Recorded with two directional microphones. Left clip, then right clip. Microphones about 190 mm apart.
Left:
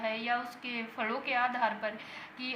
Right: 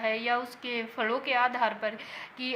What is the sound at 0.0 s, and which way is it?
A woman's voice, 20° right (ahead or behind).